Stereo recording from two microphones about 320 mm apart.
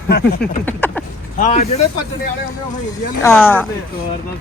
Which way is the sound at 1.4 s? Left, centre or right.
Left.